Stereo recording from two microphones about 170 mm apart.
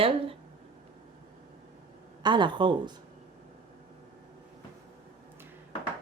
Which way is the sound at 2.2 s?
25° right (ahead or behind).